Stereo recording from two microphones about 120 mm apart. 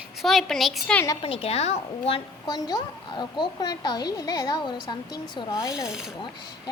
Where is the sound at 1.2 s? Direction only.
50° left (ahead or behind).